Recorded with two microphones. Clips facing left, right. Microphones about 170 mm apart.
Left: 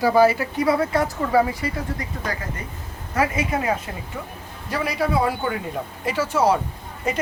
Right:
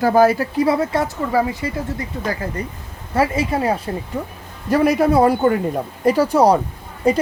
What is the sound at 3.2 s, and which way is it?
Speech, 30° right (ahead or behind).